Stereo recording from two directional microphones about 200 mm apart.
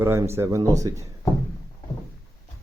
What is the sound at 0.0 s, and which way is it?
Speech, 15° right (ahead or behind).